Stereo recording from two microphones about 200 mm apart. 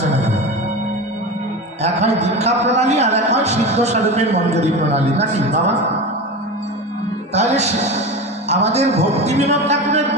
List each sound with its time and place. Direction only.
0.1 s music: 35° right (ahead or behind)
1.8 s a man's voice: 35° right (ahead or behind)
7.3 s a man's voice: 35° right (ahead or behind)